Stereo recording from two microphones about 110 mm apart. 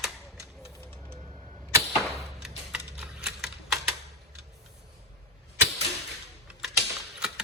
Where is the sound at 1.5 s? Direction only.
20° left (ahead or behind).